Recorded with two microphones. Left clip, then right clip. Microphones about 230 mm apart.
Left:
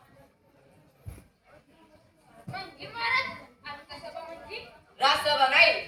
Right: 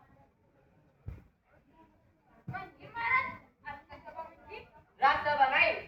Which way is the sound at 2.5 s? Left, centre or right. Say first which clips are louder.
Left 4 dB; left.